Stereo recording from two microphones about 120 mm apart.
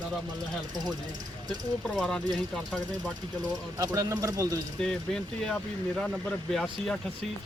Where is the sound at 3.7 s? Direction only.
30° right (ahead or behind).